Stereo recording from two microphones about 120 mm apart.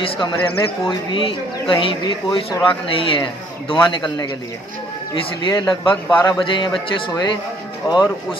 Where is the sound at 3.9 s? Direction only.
40° left (ahead or behind).